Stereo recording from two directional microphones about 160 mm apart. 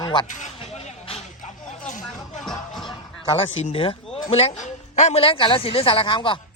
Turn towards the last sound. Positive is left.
turn(degrees=30)  # may be behind; listen again after turning